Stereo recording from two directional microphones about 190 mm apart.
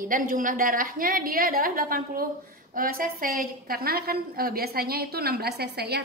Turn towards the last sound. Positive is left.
turn(degrees=-60)  # may be behind; listen again after turning